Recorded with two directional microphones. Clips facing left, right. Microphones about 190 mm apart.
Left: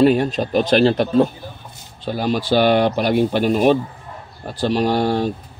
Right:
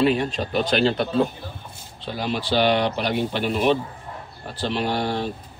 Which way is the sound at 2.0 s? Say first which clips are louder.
Left 6 dB; 45° left (ahead or behind).